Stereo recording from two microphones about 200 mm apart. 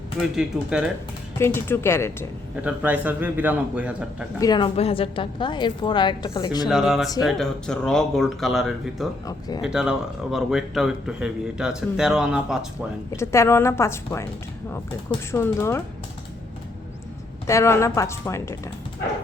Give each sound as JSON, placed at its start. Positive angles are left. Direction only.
{"t": 0.3, "sound": "a man's voice", "side_deg": -5}
{"t": 1.4, "sound": "a woman's voice", "side_deg": 10}
{"t": 2.6, "sound": "a man's voice", "side_deg": -10}
{"t": 4.4, "sound": "a woman's voice", "side_deg": 20}
{"t": 6.7, "sound": "a man's voice", "side_deg": 0}
{"t": 13.1, "sound": "a woman's voice", "side_deg": 15}
{"t": 15.3, "sound": "a woman's voice", "side_deg": 15}
{"t": 17.4, "sound": "a woman's voice", "side_deg": 15}